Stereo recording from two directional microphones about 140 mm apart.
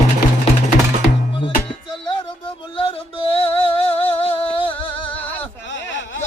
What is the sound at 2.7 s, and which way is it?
Music, 40° left (ahead or behind).